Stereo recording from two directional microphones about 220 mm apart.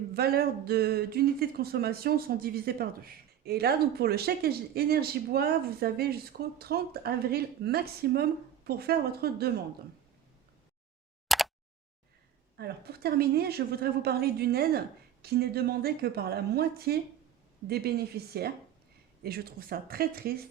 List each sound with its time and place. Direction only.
0.1 s speech: 45° right (ahead or behind)
11.3 s a sound: centre (ahead or behind)
12.5 s speech: 45° right (ahead or behind)